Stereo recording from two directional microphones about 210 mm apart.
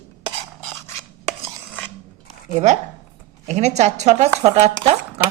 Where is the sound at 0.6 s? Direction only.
10° left (ahead or behind).